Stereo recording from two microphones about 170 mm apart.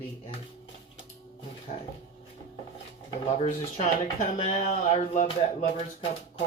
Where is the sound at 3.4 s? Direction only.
40° left (ahead or behind).